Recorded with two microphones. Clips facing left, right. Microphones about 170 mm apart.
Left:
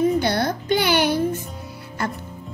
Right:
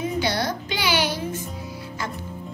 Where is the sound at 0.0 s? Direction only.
55° left (ahead or behind).